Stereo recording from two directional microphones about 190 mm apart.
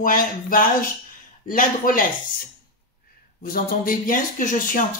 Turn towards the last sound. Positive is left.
turn(degrees=45)  # may be behind; listen again after turning